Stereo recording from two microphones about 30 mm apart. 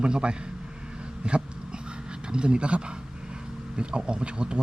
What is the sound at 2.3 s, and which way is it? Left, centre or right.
Speech, right.